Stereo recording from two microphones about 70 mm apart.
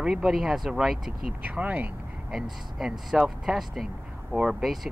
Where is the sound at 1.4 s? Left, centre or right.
Right.